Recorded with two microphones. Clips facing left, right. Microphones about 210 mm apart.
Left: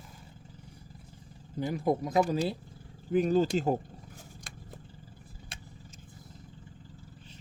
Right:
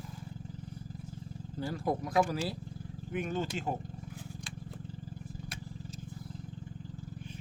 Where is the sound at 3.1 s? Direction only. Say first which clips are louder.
Left 9 dB; 35° left (ahead or behind).